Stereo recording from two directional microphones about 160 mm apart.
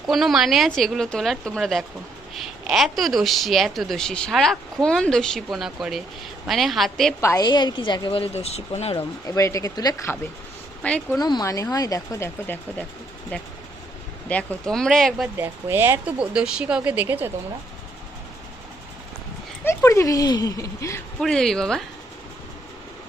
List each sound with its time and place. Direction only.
0.1 s speech: centre (ahead or behind)
7.2 s speech: 20° left (ahead or behind); by 9.0 s 40° left (ahead or behind)
9.2 s speech: 20° left (ahead or behind)
10.8 s speech: 5° left (ahead or behind)
11.2 s speech: 25° left (ahead or behind); by 15.3 s centre (ahead or behind)
15.4 s speech: 15° right (ahead or behind)
19.6 s speech: 15° left (ahead or behind)
21.2 s speech: 5° left (ahead or behind)